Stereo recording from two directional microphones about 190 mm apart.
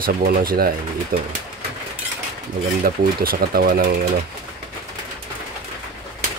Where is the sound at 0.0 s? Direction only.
50° right (ahead or behind).